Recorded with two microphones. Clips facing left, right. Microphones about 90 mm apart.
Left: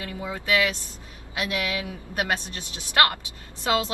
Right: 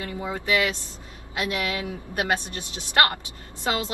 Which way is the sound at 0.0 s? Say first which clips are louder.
Right 2 dB; 25° right (ahead or behind).